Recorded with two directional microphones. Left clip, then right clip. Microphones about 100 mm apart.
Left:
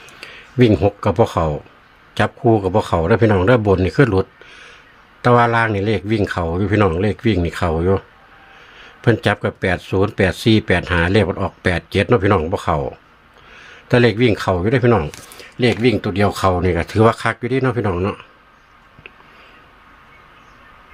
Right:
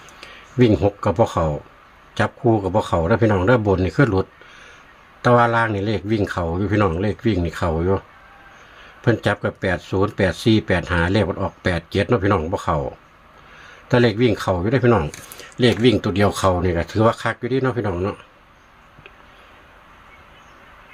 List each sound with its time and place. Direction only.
0.0 s a man's voice: 25° left (ahead or behind)
15.4 s a sound: 5° right (ahead or behind)
15.8 s speech: centre (ahead or behind)
16.2 s a man's voice: 20° left (ahead or behind)
16.6 s speech: 35° left (ahead or behind); by 18.2 s 55° left (ahead or behind)